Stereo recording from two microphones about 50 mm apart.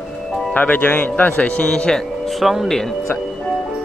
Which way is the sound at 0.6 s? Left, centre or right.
Left.